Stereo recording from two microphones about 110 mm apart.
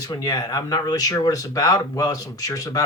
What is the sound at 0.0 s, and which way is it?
Speech, 35° left (ahead or behind).